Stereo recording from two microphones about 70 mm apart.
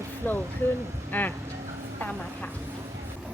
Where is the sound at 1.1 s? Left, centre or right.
Left.